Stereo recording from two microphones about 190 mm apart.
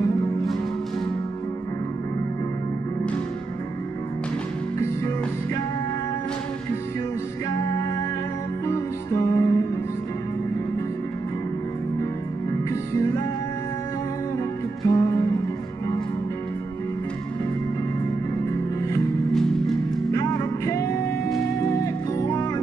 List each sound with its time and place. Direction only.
4.7 s music: 15° left (ahead or behind)
8.6 s music: 15° left (ahead or behind)
12.9 s music: 15° left (ahead or behind)
14.9 s music: 20° left (ahead or behind)
20.1 s music: 15° left (ahead or behind)